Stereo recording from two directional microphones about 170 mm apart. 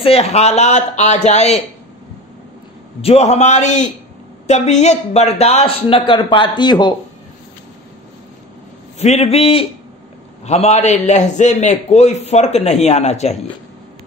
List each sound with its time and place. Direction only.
0.0 s a man's voice: 35° left (ahead or behind)
3.0 s a man's voice: 35° left (ahead or behind)
9.0 s a man's voice: 40° left (ahead or behind)